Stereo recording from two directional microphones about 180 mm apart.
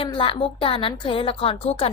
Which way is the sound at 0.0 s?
30° left (ahead or behind).